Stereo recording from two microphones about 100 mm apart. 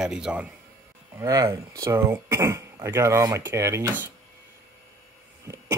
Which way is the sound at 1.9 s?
25° right (ahead or behind).